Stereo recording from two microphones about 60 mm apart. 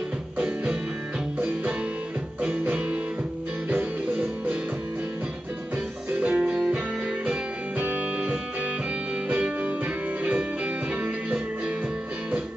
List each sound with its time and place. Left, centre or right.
1.4 s music: right
6.1 s music: right